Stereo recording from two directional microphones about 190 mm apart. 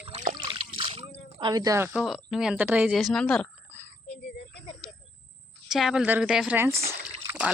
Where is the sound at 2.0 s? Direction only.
Centre (ahead or behind).